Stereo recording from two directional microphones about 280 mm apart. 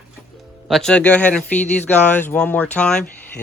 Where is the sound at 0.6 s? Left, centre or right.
Centre.